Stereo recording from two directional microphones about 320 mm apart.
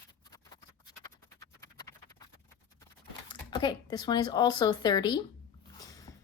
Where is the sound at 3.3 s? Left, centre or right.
Centre.